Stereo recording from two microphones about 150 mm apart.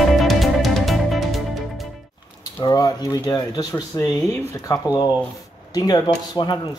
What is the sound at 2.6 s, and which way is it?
Speech, 25° left (ahead or behind).